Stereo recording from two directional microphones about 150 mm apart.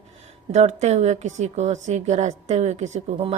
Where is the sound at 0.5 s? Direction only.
45° right (ahead or behind).